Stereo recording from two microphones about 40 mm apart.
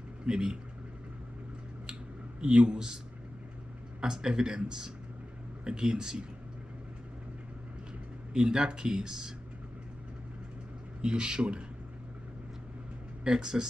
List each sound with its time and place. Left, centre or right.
0.3 s speech: centre
2.4 s speech: right
4.0 s speech: centre
8.3 s speech: right
11.0 s speech: right
13.2 s speech: centre